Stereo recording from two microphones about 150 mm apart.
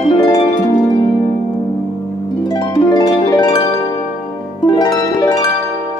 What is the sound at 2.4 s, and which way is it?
Harp, 25° left (ahead or behind).